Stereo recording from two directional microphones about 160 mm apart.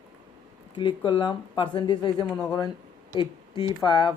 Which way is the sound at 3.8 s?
30° left (ahead or behind).